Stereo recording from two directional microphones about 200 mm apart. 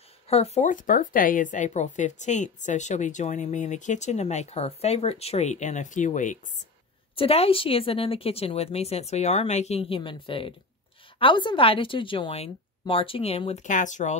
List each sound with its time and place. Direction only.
0.3 s a woman's voice: 35° left (ahead or behind)